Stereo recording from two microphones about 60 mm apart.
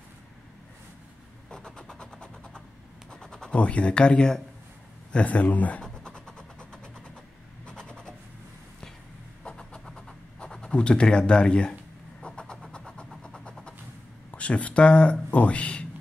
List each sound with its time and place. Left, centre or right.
1.5 s vehicle: centre
3.1 s speech: centre
5.8 s vehicle: centre
7.6 s a sound: centre
9.4 s vehicle: centre
9.8 s writing: centre
12.2 s vehicle: centre
14.3 s speech: left